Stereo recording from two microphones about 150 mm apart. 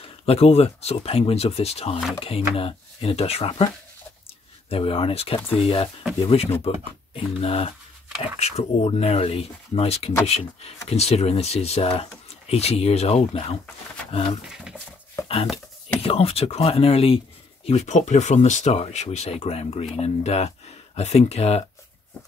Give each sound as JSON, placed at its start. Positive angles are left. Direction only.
{"t": 0.0, "sound": "speech", "side_deg": 40}
{"t": 4.6, "sound": "speech", "side_deg": 40}
{"t": 14.4, "sound": "speech", "side_deg": -5}
{"t": 15.2, "sound": "dishes", "side_deg": 20}
{"t": 16.0, "sound": "speech", "side_deg": 40}
{"t": 17.6, "sound": "speech", "side_deg": 50}